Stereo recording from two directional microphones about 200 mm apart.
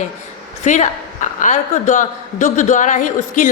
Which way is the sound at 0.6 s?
35° left (ahead or behind).